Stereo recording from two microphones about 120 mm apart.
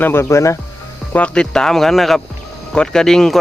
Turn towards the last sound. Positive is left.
turn(degrees=5)  # may be behind; listen again after turning